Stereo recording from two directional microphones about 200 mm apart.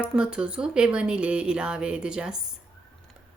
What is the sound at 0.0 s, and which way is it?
Speech, 5° right (ahead or behind).